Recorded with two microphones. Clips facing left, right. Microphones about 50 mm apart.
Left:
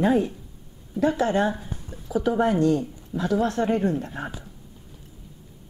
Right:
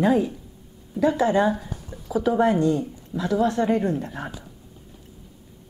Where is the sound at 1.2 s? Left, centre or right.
Centre.